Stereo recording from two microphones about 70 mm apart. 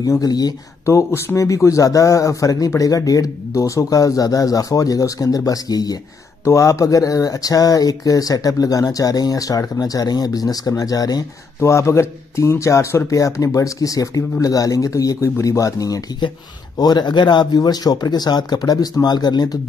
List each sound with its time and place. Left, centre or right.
0.0 s speech: left
0.8 s a man's voice: left
6.4 s speech: left
11.6 s a man's voice: left
16.7 s speech: left